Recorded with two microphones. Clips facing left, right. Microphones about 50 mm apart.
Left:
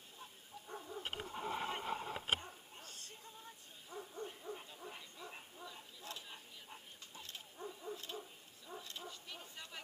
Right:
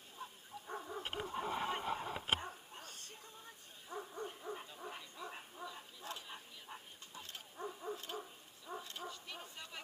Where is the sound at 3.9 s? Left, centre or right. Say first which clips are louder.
Right 2 dB; right.